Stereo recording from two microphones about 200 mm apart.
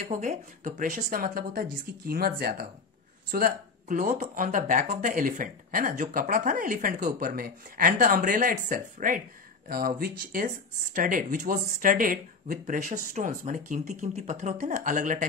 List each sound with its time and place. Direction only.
0.0 s speech: 40° right (ahead or behind)